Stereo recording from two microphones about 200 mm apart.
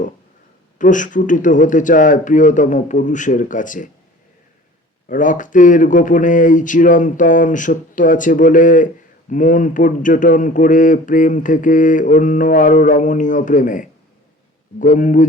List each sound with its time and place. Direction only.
0.8 s speech: 40° left (ahead or behind)
5.0 s speech: 40° left (ahead or behind)